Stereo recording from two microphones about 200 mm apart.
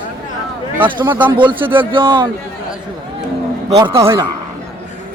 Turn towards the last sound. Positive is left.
turn(degrees=-15)  # may be behind; listen again after turning